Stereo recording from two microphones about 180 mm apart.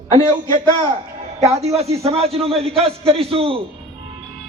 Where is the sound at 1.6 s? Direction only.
35° right (ahead or behind).